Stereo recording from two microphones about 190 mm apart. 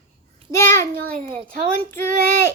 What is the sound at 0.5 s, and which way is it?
A child's voice, 15° left (ahead or behind).